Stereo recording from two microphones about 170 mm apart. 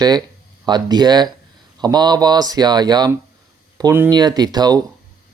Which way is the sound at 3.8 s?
15° right (ahead or behind).